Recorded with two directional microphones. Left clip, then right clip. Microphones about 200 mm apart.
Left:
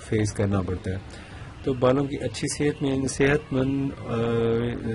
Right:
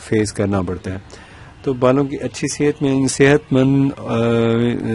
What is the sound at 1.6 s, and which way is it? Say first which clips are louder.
Speech: right 7 dB; 40° right (ahead or behind).